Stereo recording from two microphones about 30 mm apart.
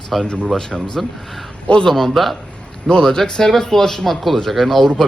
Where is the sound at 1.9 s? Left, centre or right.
Centre.